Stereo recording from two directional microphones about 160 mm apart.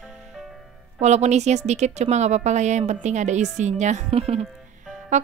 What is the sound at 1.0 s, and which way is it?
A woman's voice, 45° right (ahead or behind).